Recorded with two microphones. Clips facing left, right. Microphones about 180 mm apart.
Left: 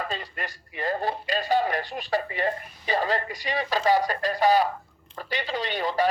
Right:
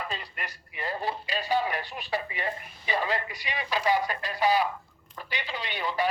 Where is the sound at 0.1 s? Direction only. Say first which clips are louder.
Left 4 dB; 40° left (ahead or behind).